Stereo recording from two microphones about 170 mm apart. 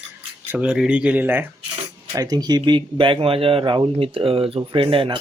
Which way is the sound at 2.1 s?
20° right (ahead or behind).